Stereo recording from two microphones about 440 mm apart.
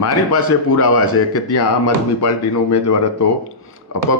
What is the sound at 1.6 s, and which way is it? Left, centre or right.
Speech, left.